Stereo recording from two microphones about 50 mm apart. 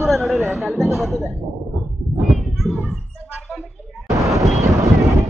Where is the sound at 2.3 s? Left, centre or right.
Centre.